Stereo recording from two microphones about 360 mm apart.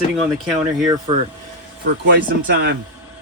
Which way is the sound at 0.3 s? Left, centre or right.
Centre.